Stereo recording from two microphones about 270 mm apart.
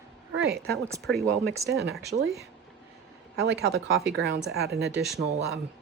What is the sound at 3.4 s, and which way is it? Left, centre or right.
Speech, right.